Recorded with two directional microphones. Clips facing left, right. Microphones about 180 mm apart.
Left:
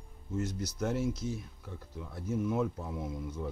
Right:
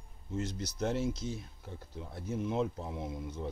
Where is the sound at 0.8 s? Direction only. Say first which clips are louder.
Even; 25° right (ahead or behind).